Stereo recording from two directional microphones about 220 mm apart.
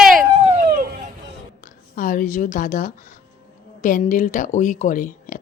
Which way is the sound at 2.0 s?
40° left (ahead or behind).